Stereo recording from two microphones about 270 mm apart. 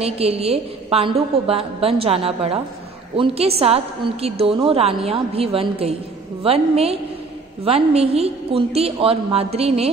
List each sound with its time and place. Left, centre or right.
0.0 s a woman's voice: right